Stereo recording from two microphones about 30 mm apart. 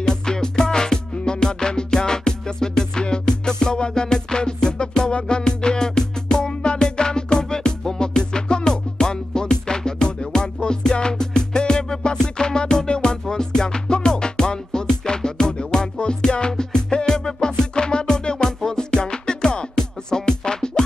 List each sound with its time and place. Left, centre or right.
0.0 s music: left